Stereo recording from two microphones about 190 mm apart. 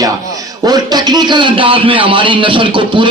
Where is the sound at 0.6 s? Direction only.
20° right (ahead or behind).